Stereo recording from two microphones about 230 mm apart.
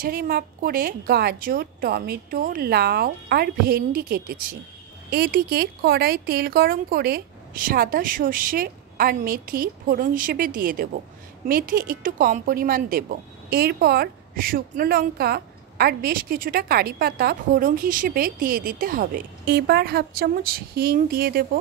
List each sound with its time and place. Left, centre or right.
0.0 s speech: right